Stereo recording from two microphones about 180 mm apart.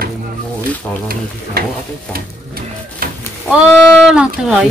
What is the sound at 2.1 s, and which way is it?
Printer, 55° right (ahead or behind).